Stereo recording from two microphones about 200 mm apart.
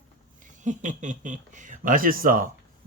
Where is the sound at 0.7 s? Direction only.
40° right (ahead or behind).